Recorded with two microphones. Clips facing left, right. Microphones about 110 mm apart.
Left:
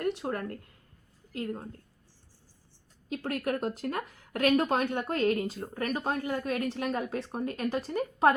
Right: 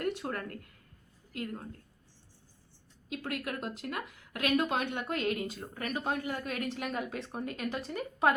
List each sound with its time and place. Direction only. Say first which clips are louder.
0.0 s speech: left 3 dB; 25° left (ahead or behind)
3.1 s speech: left 6 dB; 35° left (ahead or behind)